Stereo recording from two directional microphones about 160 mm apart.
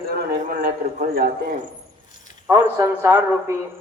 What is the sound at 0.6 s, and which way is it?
Speech, 65° right (ahead or behind).